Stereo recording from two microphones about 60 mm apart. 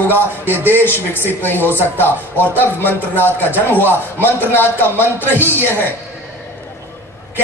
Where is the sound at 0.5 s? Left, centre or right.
Right.